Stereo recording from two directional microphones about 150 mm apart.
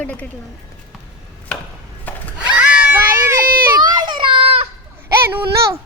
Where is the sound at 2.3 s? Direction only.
10° right (ahead or behind).